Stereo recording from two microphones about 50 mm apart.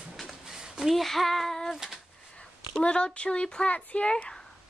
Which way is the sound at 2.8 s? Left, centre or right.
Centre.